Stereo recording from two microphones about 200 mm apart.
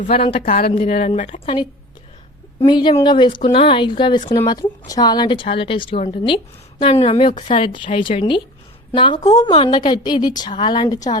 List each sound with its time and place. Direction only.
0.1 s a woman's voice: 30° left (ahead or behind)
0.4 s a woman's voice: 45° left (ahead or behind); by 1.6 s 30° left (ahead or behind)
2.6 s a woman's voice: 25° left (ahead or behind)